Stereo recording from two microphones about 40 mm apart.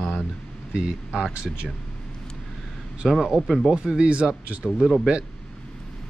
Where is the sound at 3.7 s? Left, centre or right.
Right.